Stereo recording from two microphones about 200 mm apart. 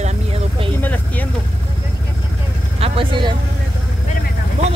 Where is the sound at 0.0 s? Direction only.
30° right (ahead or behind).